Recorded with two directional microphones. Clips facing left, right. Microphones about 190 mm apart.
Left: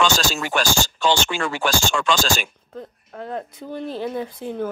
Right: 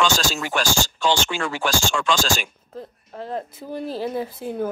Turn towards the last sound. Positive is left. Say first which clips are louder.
# right 1 dB
turn(degrees=-5)  # may be behind; listen again after turning